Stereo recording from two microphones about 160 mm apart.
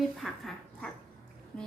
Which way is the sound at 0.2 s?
Centre (ahead or behind).